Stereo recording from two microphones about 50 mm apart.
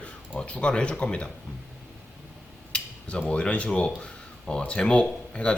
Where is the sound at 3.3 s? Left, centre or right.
Left.